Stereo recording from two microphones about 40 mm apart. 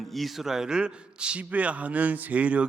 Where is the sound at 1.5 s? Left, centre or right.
Right.